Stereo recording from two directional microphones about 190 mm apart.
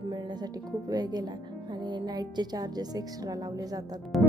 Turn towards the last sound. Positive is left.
turn(degrees=-20)  # may be behind; listen again after turning